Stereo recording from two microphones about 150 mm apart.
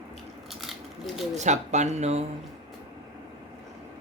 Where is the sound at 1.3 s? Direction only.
50° right (ahead or behind).